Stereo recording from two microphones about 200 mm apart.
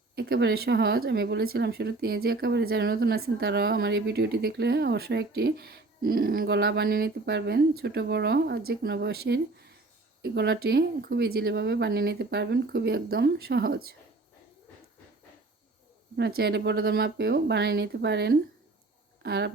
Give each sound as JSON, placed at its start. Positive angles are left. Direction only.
{"t": 0.2, "sound": "speech", "side_deg": -50}
{"t": 16.1, "sound": "speech", "side_deg": -55}